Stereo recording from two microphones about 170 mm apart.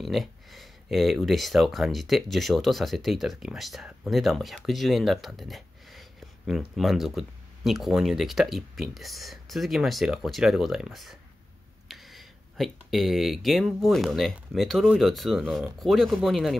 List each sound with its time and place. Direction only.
0.0 s speech: centre (ahead or behind)